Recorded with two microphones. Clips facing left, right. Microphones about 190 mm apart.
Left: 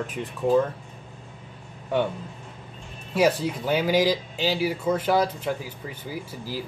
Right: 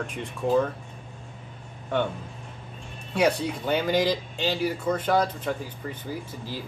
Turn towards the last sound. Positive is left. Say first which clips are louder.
# left 1 dB
turn(degrees=10)  # may be behind; listen again after turning